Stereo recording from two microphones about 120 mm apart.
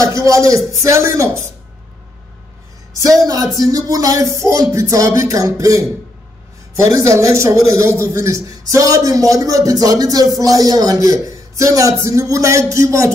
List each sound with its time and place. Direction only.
0.0 s a man's voice: 25° right (ahead or behind)
3.0 s a man's voice: 30° right (ahead or behind)